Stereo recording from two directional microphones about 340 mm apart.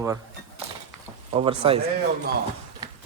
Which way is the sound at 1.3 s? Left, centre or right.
Centre.